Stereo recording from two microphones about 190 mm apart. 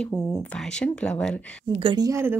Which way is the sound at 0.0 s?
5° left (ahead or behind).